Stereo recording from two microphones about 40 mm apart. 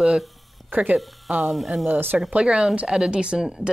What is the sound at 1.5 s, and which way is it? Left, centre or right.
Speech, centre.